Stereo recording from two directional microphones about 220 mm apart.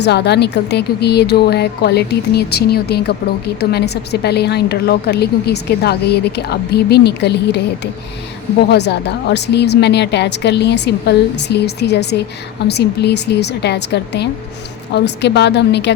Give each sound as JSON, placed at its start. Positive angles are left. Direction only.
{"t": 0.0, "sound": "a woman's voice", "side_deg": 50}
{"t": 8.7, "sound": "a woman's voice", "side_deg": 50}